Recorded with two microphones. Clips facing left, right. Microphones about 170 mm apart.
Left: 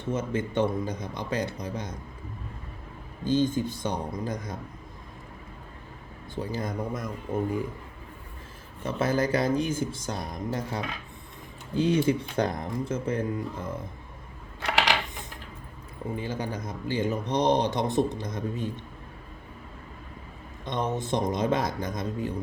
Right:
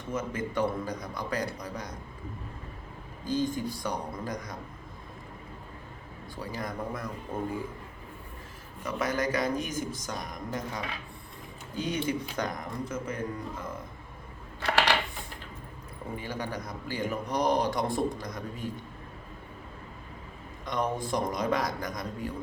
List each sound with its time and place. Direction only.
0.0 s speech: 25° left (ahead or behind)
3.2 s speech: 25° left (ahead or behind)
6.3 s speech: 25° left (ahead or behind)
8.8 s speech: 25° left (ahead or behind)
16.1 s speech: 25° left (ahead or behind)
20.7 s speech: 25° left (ahead or behind)